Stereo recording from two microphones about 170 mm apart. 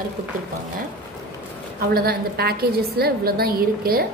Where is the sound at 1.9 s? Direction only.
60° right (ahead or behind).